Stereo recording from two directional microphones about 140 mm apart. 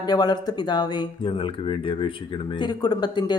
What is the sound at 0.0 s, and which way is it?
Speech, 30° left (ahead or behind).